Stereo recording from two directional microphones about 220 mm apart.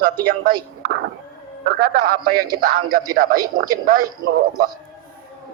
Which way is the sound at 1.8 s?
45° right (ahead or behind).